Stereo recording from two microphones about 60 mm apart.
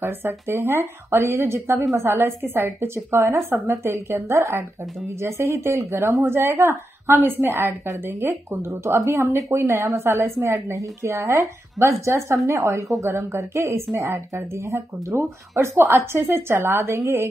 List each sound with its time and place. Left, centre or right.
0.0 s speech: right
7.5 s speech: right
8.1 s speech: right
8.6 s speech: right
10.4 s a woman's voice: right
16.8 s a woman's voice: right